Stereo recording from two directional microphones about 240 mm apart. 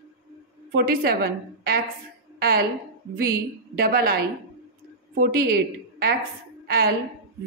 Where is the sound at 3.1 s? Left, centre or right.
Right.